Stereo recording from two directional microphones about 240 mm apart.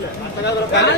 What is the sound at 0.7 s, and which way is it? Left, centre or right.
Speech, left.